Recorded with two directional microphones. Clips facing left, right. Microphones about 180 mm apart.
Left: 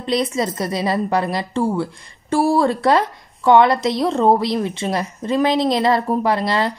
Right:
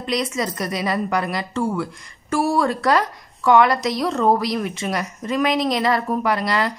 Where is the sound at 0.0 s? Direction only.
30° left (ahead or behind).